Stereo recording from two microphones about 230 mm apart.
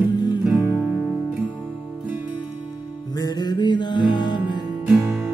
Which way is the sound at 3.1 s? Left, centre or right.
Centre.